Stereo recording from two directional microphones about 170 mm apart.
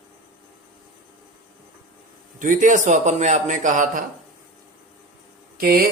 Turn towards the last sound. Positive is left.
turn(degrees=-60)  # may be behind; listen again after turning